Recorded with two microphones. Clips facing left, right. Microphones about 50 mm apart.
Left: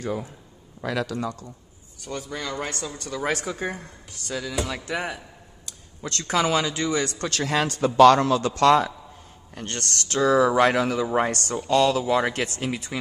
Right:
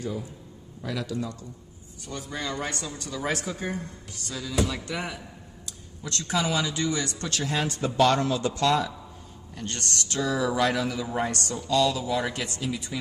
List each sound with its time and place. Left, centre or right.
0.0 s speech: left
0.8 s a man's voice: left
2.8 s speech: left
4.6 s speech: left
5.7 s speech: left
7.3 s a man's voice: left
8.5 s speech: left